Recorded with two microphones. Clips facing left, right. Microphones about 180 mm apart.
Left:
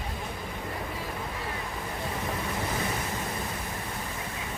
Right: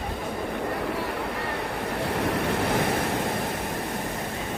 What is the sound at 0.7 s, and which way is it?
Waves, 70° right (ahead or behind).